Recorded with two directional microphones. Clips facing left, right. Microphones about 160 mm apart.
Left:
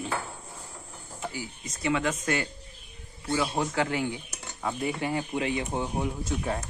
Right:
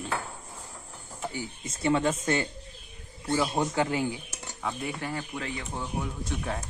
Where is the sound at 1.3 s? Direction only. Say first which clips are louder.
Right 2 dB; 25° right (ahead or behind).